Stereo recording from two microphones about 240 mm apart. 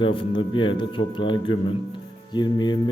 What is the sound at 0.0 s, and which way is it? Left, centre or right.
A man's voice, left.